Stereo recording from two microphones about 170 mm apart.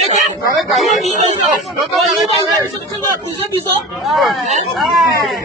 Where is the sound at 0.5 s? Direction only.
Centre (ahead or behind).